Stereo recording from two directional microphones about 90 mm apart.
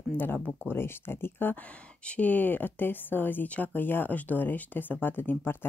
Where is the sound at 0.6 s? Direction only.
25° left (ahead or behind).